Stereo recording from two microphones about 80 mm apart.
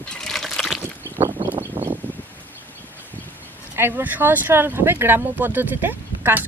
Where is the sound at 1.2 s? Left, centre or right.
Right.